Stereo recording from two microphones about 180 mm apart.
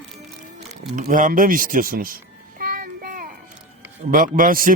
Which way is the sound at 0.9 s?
45° right (ahead or behind).